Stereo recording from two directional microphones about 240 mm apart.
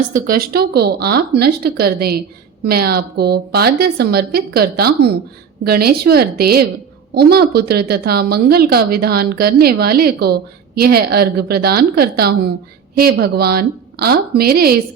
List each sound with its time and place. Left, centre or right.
0.1 s a woman's voice: right